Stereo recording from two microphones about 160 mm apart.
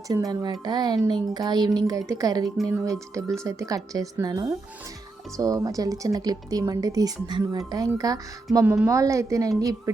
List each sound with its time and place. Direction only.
0.1 s speech: 25° right (ahead or behind)
8.6 s a woman's voice: 10° right (ahead or behind)
8.9 s speech: 20° right (ahead or behind)